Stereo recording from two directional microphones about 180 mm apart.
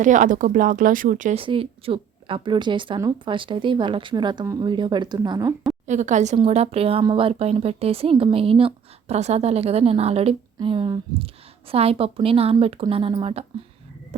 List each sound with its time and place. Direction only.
0.0 s speech: 45° right (ahead or behind)
1.4 s a woman's voice: 30° right (ahead or behind)
5.8 s speech: 40° right (ahead or behind)